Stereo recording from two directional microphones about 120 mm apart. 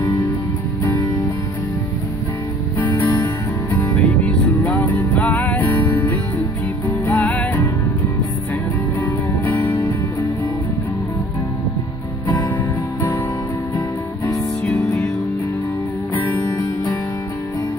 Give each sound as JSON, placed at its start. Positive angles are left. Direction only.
{"t": 3.8, "sound": "music", "side_deg": 10}
{"t": 9.0, "sound": "music", "side_deg": 15}
{"t": 13.7, "sound": "music", "side_deg": 30}
{"t": 14.7, "sound": "music", "side_deg": 10}